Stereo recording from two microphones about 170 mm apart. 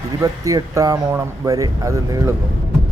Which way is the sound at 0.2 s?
20° right (ahead or behind).